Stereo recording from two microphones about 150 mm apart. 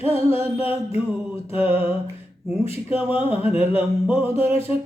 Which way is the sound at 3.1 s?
40° left (ahead or behind).